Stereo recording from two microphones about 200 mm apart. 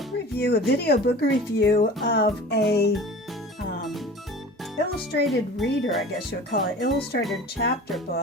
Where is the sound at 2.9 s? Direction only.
Centre (ahead or behind).